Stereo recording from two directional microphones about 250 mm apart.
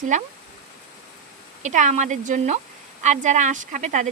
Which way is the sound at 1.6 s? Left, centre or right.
Right.